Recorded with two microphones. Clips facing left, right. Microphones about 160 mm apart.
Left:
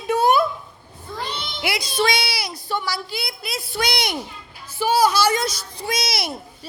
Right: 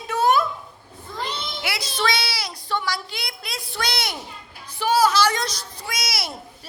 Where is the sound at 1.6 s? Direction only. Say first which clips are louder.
Left 4 dB; 15° left (ahead or behind).